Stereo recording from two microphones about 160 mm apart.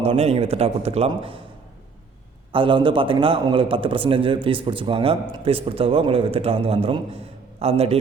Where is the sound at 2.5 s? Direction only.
30° right (ahead or behind).